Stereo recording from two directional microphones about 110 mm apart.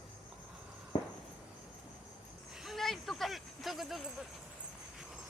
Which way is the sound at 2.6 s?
Centre (ahead or behind).